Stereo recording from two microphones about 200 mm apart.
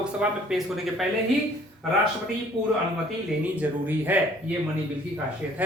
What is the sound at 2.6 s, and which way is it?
Speech, 25° right (ahead or behind).